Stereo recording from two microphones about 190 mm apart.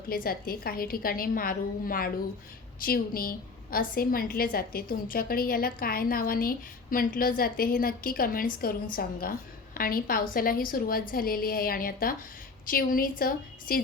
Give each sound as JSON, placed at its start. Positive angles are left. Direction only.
{"t": 0.1, "sound": "a woman's voice", "side_deg": 50}